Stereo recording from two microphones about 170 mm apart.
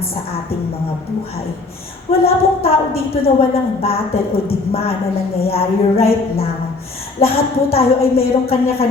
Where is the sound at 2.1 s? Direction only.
35° left (ahead or behind).